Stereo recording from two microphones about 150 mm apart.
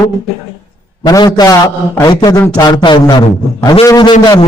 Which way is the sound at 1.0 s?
25° left (ahead or behind).